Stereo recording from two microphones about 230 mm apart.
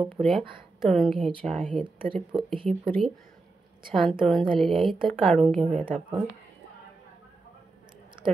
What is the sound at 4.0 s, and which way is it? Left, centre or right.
Speech, centre.